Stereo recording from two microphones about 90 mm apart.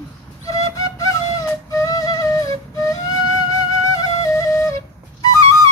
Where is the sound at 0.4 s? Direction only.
35° left (ahead or behind).